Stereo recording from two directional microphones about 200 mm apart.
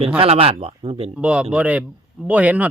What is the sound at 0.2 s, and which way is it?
Speech, 30° right (ahead or behind).